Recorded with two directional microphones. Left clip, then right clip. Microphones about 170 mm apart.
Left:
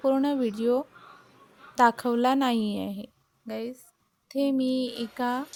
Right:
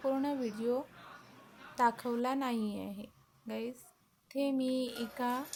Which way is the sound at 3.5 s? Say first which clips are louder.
Left 6 dB; 35° left (ahead or behind).